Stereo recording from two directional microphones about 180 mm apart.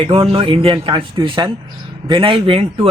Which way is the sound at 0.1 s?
30° right (ahead or behind).